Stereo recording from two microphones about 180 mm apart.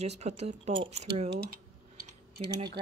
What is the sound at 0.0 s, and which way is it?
Speech, 35° right (ahead or behind).